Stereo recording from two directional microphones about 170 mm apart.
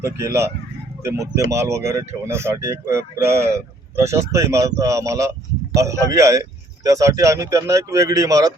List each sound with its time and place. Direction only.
0.0 s speech: 15° right (ahead or behind)